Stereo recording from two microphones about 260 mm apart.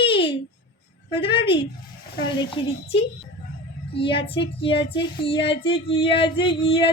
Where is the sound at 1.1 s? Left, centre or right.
Centre.